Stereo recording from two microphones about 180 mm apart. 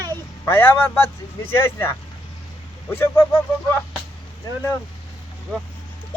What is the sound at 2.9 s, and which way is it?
Speech, 15° left (ahead or behind).